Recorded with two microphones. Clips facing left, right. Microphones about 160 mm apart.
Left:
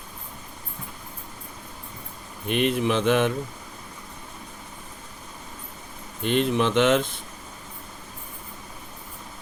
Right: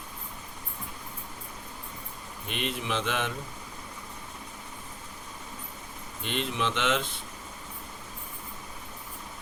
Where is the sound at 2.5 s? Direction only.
55° left (ahead or behind).